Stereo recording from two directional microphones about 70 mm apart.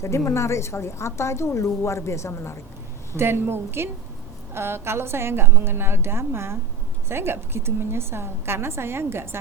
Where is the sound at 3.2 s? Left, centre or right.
Right.